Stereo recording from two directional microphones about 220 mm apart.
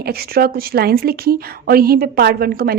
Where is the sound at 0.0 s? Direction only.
45° right (ahead or behind).